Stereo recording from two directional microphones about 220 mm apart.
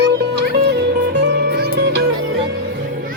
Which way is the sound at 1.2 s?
50° right (ahead or behind).